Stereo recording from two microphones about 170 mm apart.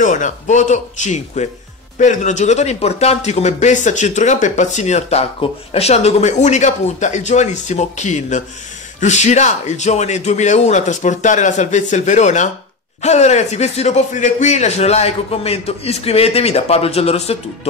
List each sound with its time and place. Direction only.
0.0 s speech: 50° left (ahead or behind)